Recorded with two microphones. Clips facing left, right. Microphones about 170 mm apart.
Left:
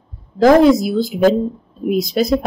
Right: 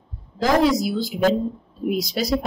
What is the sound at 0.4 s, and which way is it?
Speech, 50° left (ahead or behind).